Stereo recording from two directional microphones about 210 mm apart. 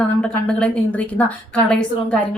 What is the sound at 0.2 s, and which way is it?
A woman's voice, 5° left (ahead or behind).